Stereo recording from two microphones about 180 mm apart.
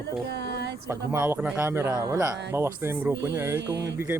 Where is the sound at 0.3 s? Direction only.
70° right (ahead or behind).